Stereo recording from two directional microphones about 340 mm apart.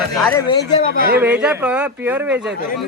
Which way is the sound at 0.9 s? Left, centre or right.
Right.